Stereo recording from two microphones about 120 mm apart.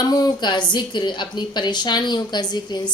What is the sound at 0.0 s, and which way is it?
Speech, 35° left (ahead or behind).